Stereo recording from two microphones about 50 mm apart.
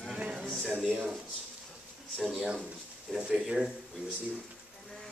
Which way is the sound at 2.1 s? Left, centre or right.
Centre.